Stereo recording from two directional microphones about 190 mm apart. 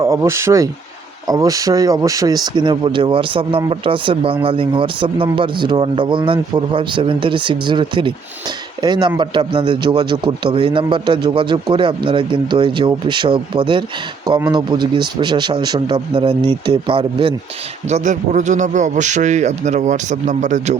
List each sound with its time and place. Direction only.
0.0 s a man's voice: 15° right (ahead or behind)
17.8 s a man's voice: 40° right (ahead or behind)